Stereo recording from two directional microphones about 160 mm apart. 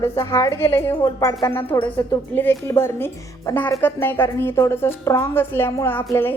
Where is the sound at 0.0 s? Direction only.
20° left (ahead or behind).